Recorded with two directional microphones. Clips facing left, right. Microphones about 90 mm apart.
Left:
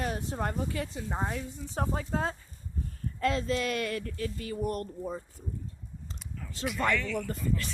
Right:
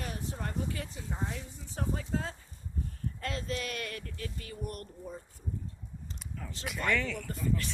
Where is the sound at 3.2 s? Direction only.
90° left.